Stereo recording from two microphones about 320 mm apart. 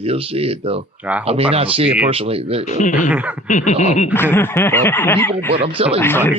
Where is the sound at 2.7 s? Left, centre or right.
Left.